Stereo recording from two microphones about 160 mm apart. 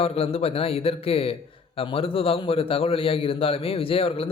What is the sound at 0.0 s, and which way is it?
A man's voice, 40° left (ahead or behind).